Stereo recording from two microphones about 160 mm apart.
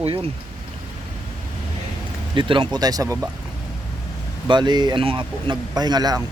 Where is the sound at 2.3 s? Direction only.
30° right (ahead or behind).